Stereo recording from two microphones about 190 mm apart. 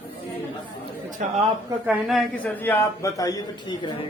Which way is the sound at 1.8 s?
5° right (ahead or behind).